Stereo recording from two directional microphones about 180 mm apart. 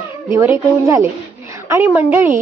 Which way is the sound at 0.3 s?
15° right (ahead or behind).